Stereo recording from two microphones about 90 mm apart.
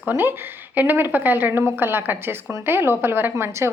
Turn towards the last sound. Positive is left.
turn(degrees=-30)  # may be behind; listen again after turning